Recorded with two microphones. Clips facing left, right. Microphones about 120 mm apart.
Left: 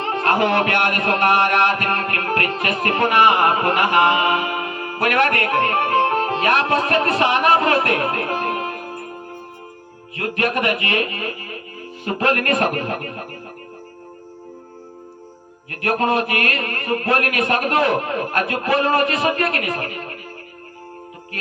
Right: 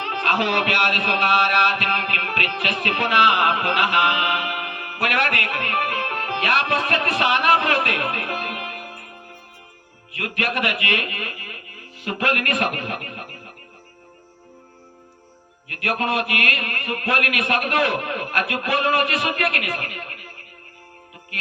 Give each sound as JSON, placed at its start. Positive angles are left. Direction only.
{"t": 0.0, "sound": "a man's voice", "side_deg": 35}
{"t": 10.2, "sound": "speech", "side_deg": 30}
{"t": 15.7, "sound": "speech", "side_deg": 30}